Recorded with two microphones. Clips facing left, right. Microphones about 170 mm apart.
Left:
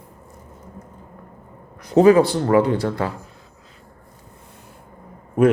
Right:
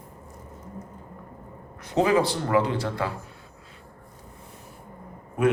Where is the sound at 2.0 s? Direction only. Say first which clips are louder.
Left 10 dB; 50° left (ahead or behind).